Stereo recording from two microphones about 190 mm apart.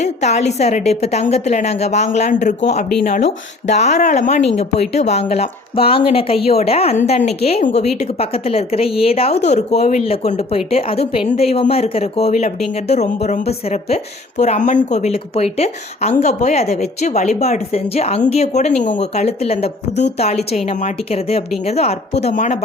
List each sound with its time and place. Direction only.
0.0 s speech: 35° left (ahead or behind)